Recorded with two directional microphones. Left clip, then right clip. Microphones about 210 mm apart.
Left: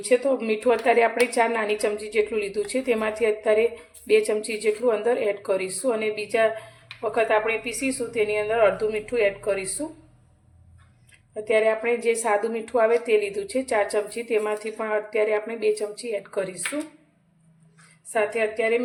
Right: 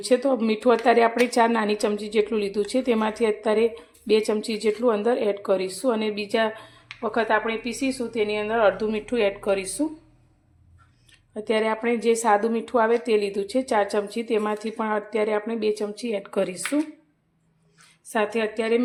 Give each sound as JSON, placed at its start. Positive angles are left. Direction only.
{"t": 0.0, "sound": "a woman's voice", "side_deg": -35}
{"t": 11.4, "sound": "a woman's voice", "side_deg": -35}
{"t": 18.1, "sound": "a woman's voice", "side_deg": -40}